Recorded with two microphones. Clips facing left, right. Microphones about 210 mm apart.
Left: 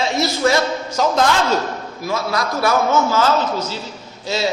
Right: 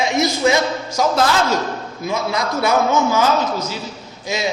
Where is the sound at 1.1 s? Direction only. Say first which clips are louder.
Left 1 dB; 5° right (ahead or behind).